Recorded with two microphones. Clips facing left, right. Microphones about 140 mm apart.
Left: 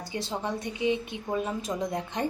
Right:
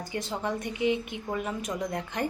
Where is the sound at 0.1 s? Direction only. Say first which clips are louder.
Even; 20° left (ahead or behind).